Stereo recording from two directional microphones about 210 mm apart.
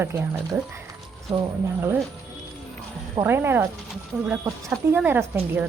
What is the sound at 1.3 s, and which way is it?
Speech, 15° right (ahead or behind).